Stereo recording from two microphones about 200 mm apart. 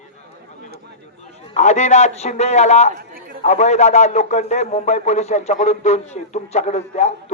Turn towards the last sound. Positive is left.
turn(degrees=35)  # may be behind; listen again after turning